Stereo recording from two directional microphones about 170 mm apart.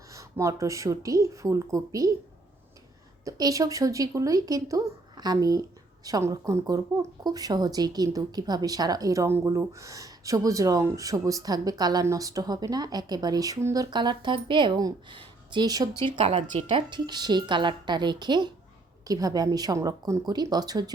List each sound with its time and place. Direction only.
0.1 s speech: 20° right (ahead or behind)
3.2 s speech: 20° right (ahead or behind)